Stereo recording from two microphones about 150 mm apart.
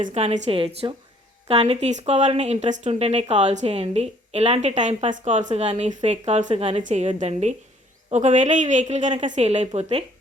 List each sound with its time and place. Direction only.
0.0 s speech: 45° right (ahead or behind)